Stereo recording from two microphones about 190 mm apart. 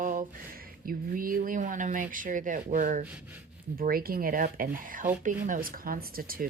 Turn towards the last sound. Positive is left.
turn(degrees=-50)  # may be behind; listen again after turning